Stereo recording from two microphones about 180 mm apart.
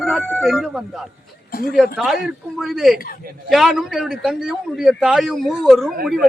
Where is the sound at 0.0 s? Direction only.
Centre (ahead or behind).